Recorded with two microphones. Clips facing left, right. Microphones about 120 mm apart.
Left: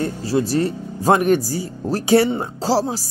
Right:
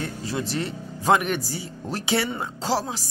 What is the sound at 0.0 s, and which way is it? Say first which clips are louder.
Speech: left 9 dB; 35° left (ahead or behind).